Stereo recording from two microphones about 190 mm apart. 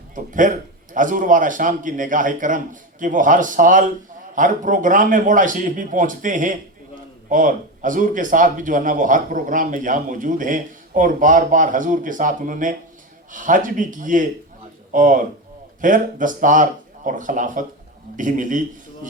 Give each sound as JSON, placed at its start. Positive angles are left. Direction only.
{"t": 0.1, "sound": "a man's voice", "side_deg": -45}